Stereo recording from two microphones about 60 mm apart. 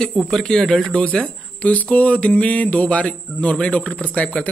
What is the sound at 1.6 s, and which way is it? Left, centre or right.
Speech, left.